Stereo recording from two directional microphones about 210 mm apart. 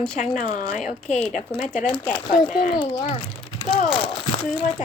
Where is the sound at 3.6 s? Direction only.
25° left (ahead or behind).